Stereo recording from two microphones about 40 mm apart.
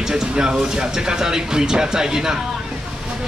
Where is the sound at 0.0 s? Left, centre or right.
Centre.